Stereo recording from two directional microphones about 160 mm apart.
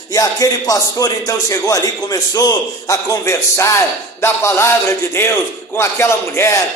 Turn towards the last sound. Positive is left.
turn(degrees=15)  # may be behind; listen again after turning